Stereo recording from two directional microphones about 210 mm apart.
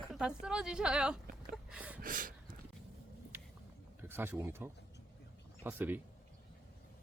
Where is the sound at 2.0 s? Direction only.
40° right (ahead or behind).